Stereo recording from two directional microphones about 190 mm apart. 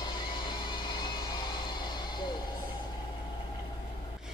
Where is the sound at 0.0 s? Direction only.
25° left (ahead or behind).